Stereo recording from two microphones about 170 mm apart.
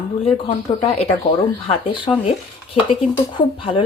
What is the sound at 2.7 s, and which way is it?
Speech, 30° left (ahead or behind).